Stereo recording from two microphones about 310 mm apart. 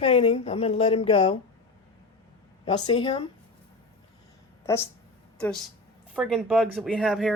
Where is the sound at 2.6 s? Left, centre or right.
Centre.